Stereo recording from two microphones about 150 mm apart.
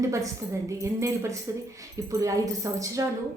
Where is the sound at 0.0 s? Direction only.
20° right (ahead or behind).